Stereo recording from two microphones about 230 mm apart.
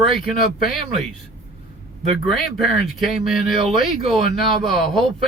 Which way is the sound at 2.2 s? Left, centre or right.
Centre.